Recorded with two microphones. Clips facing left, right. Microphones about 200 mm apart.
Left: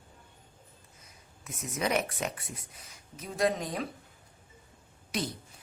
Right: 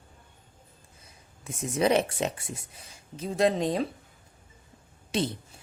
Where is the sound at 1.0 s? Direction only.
30° right (ahead or behind).